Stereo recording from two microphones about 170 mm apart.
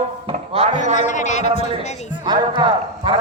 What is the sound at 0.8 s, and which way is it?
A man's voice, 45° left (ahead or behind).